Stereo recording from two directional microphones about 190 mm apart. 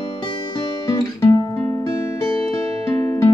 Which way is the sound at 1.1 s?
15° left (ahead or behind).